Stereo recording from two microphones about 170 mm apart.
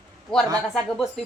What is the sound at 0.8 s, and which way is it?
Speech, 5° left (ahead or behind).